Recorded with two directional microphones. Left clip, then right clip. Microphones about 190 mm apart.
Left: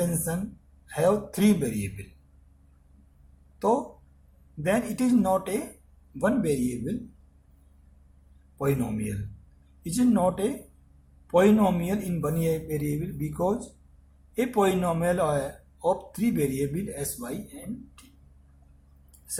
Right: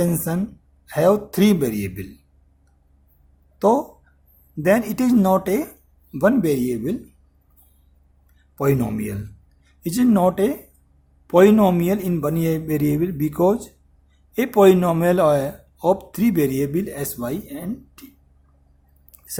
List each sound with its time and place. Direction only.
0.9 s speech: 50° right (ahead or behind)
3.6 s speech: 50° right (ahead or behind)
8.5 s speech: 50° right (ahead or behind)